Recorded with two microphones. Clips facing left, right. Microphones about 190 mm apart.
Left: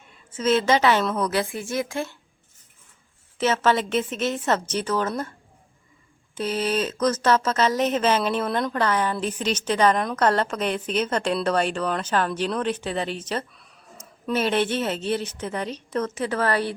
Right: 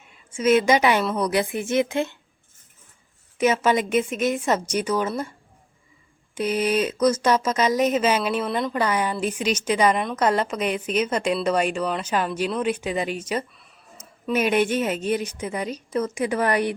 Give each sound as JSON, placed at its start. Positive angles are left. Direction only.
{"t": 0.3, "sound": "a woman's voice", "side_deg": -10}
{"t": 3.3, "sound": "a woman's voice", "side_deg": -10}
{"t": 6.3, "sound": "a woman's voice", "side_deg": -10}